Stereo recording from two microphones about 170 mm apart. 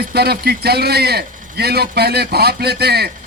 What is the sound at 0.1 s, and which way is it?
A man's voice, 70° right (ahead or behind).